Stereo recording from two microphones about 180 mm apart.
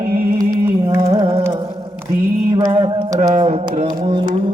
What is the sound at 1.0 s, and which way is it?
Carnatic music, 30° right (ahead or behind).